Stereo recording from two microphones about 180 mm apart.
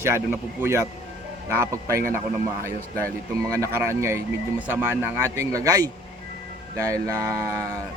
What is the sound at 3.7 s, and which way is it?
Speech, 15° right (ahead or behind).